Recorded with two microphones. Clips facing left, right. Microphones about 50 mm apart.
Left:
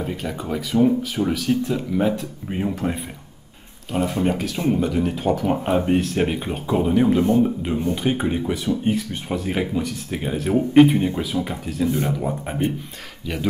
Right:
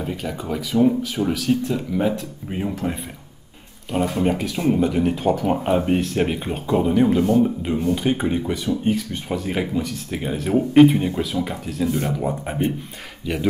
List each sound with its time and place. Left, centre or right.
0.0 s speech: centre
3.9 s speech: centre
7.2 s speech: left
7.4 s speech: centre